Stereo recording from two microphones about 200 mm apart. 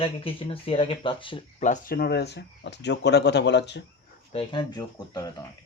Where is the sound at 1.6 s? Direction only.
40° left (ahead or behind); by 3.8 s 60° left (ahead or behind).